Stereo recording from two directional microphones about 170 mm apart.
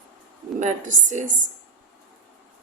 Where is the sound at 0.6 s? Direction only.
50° right (ahead or behind).